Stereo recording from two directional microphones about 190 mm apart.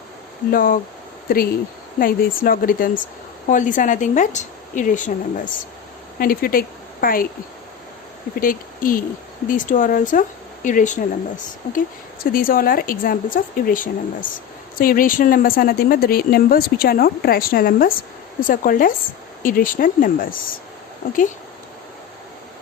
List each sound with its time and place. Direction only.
0.5 s speech: 50° left (ahead or behind)
2.0 s a woman's voice: 50° left (ahead or behind)
8.4 s speech: 45° left (ahead or behind)